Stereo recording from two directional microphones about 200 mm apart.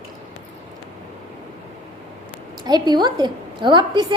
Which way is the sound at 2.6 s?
20° right (ahead or behind).